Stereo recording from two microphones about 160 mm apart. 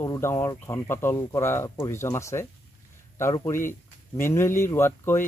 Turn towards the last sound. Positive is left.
turn(degrees=15)  # may be behind; listen again after turning